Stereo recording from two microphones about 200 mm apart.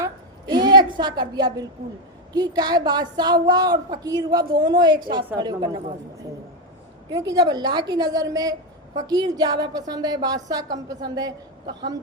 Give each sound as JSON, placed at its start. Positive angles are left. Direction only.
{"t": 0.0, "sound": "a sound", "side_deg": -20}
{"t": 2.3, "sound": "a woman's voice", "side_deg": -20}
{"t": 7.1, "sound": "a woman's voice", "side_deg": -20}